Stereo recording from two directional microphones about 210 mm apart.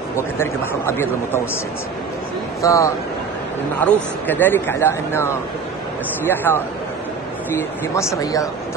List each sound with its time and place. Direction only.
0.4 s speech: 10° left (ahead or behind)
2.6 s speech: 15° left (ahead or behind)
7.8 s speech: 15° left (ahead or behind)